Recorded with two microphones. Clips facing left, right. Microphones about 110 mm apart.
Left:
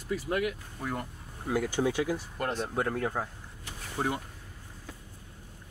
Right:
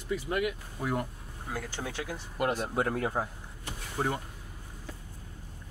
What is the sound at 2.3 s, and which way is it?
Speech, 10° right (ahead or behind).